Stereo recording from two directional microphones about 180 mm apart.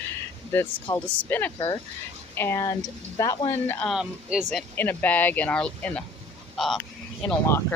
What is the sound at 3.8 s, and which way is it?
Speech, centre (ahead or behind).